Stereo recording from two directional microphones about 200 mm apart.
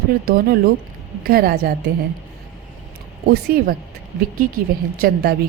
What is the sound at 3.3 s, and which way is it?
Speech, 50° right (ahead or behind).